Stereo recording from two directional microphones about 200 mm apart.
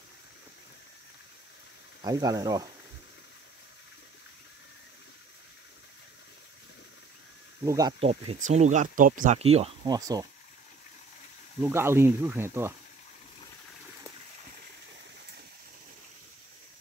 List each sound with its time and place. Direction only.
2.0 s speech: 20° right (ahead or behind)
7.6 s speech: 15° right (ahead or behind)
8.0 s speech: 30° right (ahead or behind)
9.8 s speech: 20° right (ahead or behind)
11.6 s speech: 10° right (ahead or behind)